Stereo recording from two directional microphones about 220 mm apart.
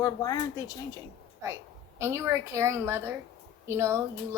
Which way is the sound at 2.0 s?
10° right (ahead or behind).